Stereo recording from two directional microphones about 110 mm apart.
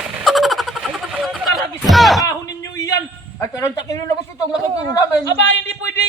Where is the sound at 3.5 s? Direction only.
30° left (ahead or behind).